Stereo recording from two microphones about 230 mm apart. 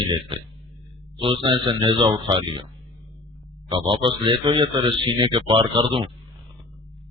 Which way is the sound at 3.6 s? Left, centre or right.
Right.